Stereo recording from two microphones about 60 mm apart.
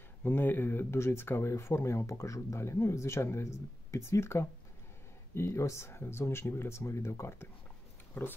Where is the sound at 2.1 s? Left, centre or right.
Left.